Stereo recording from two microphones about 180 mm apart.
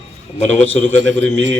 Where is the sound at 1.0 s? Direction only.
90° right.